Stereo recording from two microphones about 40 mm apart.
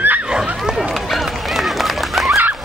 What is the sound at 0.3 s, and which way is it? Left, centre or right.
Horse, centre.